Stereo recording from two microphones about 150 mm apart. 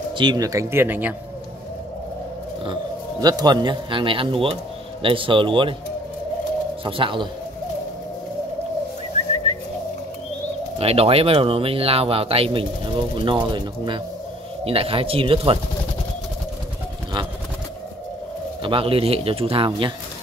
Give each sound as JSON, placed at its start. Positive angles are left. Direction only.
{"t": 0.1, "sound": "speech", "side_deg": -30}
{"t": 2.6, "sound": "speech", "side_deg": -30}
{"t": 6.8, "sound": "speech", "side_deg": -35}
{"t": 9.5, "sound": "bird", "side_deg": -50}
{"t": 10.8, "sound": "speech", "side_deg": -40}
{"t": 18.6, "sound": "speech", "side_deg": -35}